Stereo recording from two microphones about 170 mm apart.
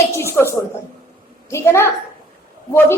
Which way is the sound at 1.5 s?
15° left (ahead or behind).